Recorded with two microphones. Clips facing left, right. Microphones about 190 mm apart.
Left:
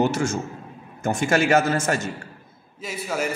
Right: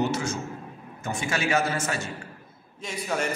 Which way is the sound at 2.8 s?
5° left (ahead or behind).